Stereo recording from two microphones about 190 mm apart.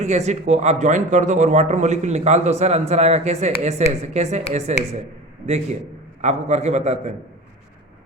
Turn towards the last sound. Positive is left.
turn(degrees=-35)  # may be behind; listen again after turning